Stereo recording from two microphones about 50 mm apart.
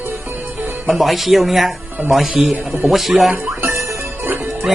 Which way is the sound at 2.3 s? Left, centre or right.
Centre.